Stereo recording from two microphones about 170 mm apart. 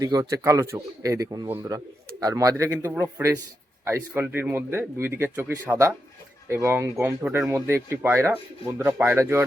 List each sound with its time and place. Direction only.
0.0 s a man's voice: 20° right (ahead or behind)